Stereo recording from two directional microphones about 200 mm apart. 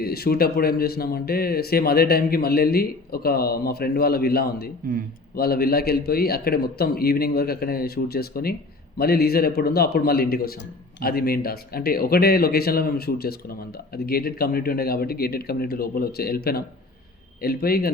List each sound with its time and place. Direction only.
0.0 s speech: 50° left (ahead or behind)